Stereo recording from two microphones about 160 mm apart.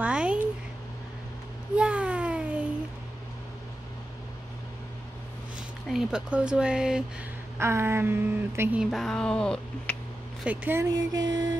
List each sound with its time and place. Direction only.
0.0 s a sound: 5° right (ahead or behind)
1.8 s a sound: 5° right (ahead or behind)
5.9 s speech: 5° right (ahead or behind)
7.5 s speech: 15° right (ahead or behind)
8.9 s speech: 5° left (ahead or behind)
10.4 s speech: 10° right (ahead or behind)